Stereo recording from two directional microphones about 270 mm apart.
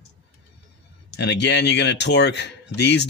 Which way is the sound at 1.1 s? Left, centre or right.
Left.